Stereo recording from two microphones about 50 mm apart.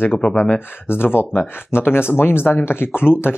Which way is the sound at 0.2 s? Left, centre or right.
Left.